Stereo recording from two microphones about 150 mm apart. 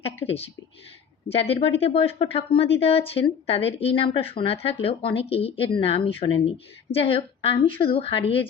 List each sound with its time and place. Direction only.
0.3 s a woman's voice: 40° left (ahead or behind)